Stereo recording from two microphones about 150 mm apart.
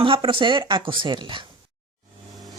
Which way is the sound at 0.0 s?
35° right (ahead or behind).